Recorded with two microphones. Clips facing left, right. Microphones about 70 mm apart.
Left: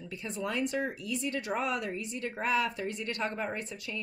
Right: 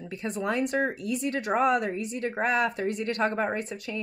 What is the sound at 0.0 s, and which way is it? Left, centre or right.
Speech, right.